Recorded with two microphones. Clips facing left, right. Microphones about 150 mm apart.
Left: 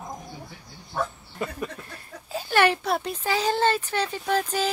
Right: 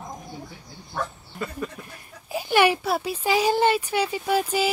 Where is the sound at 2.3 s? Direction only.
10° right (ahead or behind).